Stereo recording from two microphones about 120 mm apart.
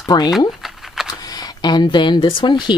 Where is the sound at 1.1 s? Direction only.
30° left (ahead or behind).